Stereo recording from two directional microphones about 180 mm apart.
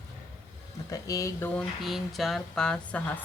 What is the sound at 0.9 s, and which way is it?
Speech, 20° left (ahead or behind).